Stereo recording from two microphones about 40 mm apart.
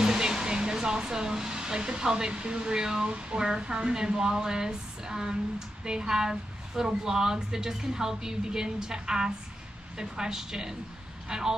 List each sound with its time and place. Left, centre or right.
0.0 s speech: centre
3.2 s a sound: right
3.4 s a woman's voice: centre